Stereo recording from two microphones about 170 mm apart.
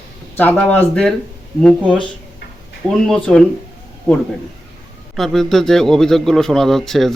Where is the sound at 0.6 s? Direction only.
5° left (ahead or behind).